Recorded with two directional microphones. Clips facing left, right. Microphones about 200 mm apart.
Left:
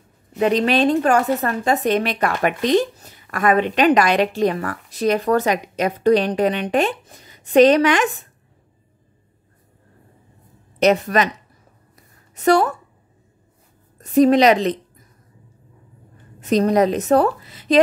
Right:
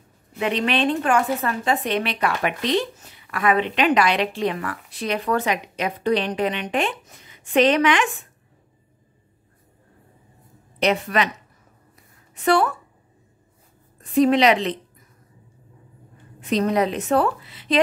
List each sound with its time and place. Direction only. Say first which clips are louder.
0.4 s a woman's voice: left 5 dB; 40° left (ahead or behind)
10.8 s speech: left 5 dB; 45° left (ahead or behind)
12.4 s a woman's voice: left 3 dB; 40° left (ahead or behind)
13.9 s a woman's voice: left 4 dB; 40° left (ahead or behind)
16.3 s a woman's voice: left 4 dB; 40° left (ahead or behind)